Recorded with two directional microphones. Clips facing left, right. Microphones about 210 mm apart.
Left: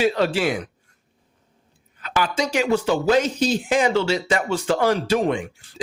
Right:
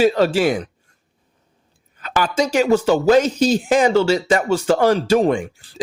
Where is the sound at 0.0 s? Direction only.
40° right (ahead or behind).